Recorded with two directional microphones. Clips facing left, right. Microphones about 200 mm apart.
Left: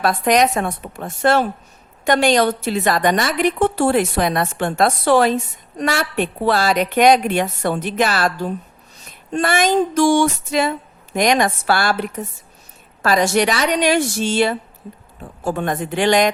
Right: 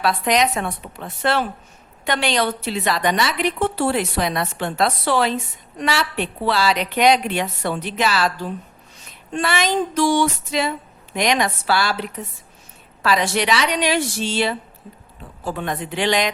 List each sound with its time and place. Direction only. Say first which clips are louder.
0.0 s a woman's voice: left 3 dB; 50° left (ahead or behind)